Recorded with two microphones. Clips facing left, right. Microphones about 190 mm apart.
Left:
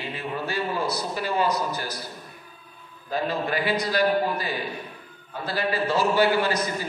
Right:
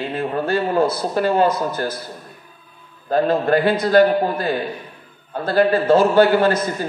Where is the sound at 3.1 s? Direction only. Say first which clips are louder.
Right 10 dB; 55° right (ahead or behind).